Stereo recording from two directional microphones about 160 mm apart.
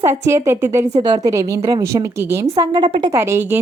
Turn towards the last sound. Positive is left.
turn(degrees=-15)  # may be behind; listen again after turning